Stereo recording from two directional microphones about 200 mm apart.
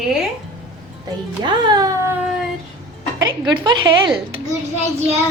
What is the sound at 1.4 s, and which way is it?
Speech, 20° right (ahead or behind).